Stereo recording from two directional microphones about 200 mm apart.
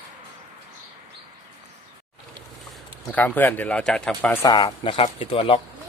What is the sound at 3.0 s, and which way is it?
Speech, 10° left (ahead or behind).